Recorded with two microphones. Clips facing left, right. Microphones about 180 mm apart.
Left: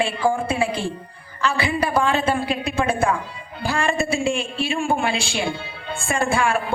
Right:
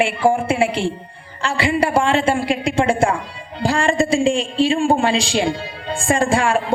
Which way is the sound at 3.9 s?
90° right.